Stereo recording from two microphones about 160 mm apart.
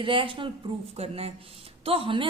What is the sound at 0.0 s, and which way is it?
A woman's voice, 35° right (ahead or behind).